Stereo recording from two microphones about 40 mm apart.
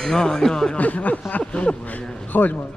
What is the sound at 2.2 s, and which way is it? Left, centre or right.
Speech, left.